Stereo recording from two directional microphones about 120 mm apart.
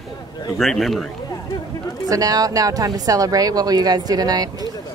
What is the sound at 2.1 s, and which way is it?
Speech, 30° right (ahead or behind).